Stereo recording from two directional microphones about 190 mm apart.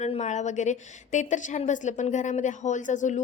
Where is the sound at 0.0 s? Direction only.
35° left (ahead or behind).